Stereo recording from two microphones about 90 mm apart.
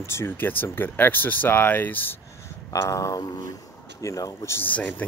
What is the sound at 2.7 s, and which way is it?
Speech, 35° left (ahead or behind).